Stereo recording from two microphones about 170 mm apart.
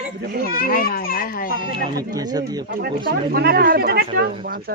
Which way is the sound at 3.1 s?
65° right (ahead or behind).